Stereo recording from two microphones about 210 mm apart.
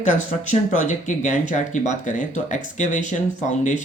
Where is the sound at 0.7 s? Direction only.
35° left (ahead or behind).